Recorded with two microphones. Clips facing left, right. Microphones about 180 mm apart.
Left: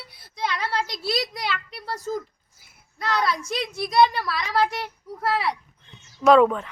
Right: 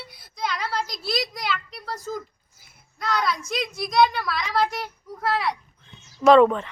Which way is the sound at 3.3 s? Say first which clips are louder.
Even; 30° left (ahead or behind).